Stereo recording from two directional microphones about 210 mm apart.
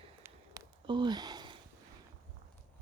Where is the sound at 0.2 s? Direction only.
15° right (ahead or behind).